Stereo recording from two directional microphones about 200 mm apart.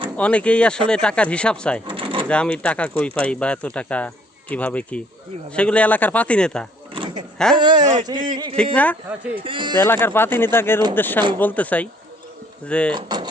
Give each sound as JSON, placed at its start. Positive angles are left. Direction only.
{"t": 0.2, "sound": "speech", "side_deg": 5}
{"t": 1.9, "sound": "a sound", "side_deg": -25}
{"t": 2.2, "sound": "speech", "side_deg": 5}
{"t": 6.9, "sound": "a sound", "side_deg": -25}
{"t": 7.5, "sound": "speech", "side_deg": -25}
{"t": 8.7, "sound": "speech", "side_deg": 5}
{"t": 9.0, "sound": "speech", "side_deg": -5}
{"t": 9.4, "sound": "speech", "side_deg": -25}
{"t": 9.7, "sound": "speech", "side_deg": 10}
{"t": 12.9, "sound": "speech", "side_deg": -20}